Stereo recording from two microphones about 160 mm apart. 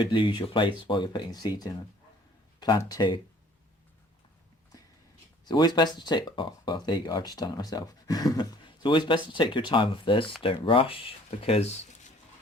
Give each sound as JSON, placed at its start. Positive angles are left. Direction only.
{"t": 0.0, "sound": "speech", "side_deg": 30}
{"t": 4.7, "sound": "a sound", "side_deg": 20}
{"t": 5.5, "sound": "speech", "side_deg": 25}